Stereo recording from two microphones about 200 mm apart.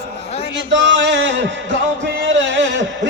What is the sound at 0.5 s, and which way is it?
Music, 65° right (ahead or behind).